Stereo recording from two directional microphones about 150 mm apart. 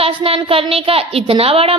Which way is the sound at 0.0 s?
40° right (ahead or behind).